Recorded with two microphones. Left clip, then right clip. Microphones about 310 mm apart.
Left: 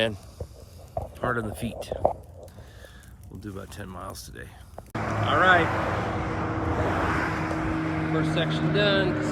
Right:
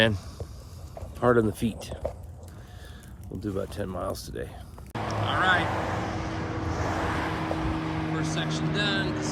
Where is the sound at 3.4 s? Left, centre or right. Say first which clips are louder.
Right 7 dB; centre.